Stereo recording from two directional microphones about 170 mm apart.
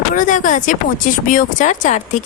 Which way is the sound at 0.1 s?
50° left (ahead or behind).